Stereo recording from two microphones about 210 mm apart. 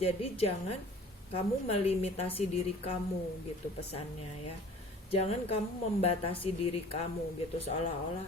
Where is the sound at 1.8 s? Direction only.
30° left (ahead or behind).